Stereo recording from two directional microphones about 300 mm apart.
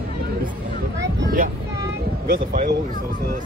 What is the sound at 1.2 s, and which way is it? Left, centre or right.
Speech, right.